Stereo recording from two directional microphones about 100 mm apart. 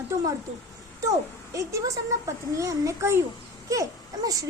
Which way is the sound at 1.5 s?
30° right (ahead or behind).